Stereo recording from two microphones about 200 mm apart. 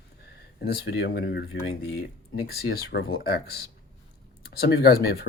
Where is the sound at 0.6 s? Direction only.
55° left (ahead or behind).